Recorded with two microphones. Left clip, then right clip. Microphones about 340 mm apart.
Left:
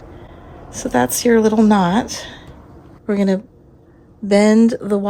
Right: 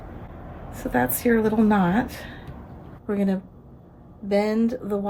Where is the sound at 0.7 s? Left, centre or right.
Centre.